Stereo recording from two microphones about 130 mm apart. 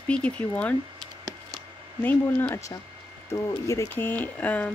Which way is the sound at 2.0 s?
15° left (ahead or behind).